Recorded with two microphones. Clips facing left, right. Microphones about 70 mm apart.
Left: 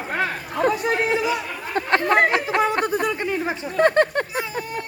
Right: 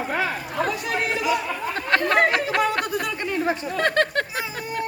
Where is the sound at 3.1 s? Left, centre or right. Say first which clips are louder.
Even; centre.